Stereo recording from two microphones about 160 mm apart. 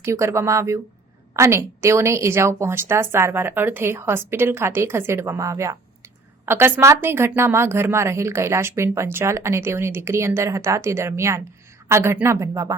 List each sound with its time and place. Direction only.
0.0 s a woman's voice: 15° right (ahead or behind)